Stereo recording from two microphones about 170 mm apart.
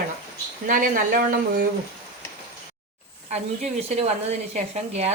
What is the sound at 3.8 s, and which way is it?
A woman's voice, 40° right (ahead or behind).